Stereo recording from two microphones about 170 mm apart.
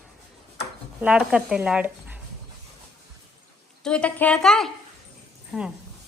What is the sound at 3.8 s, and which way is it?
A woman's voice, 5° left (ahead or behind).